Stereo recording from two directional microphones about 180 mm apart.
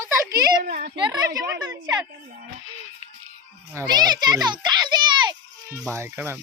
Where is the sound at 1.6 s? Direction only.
20° right (ahead or behind).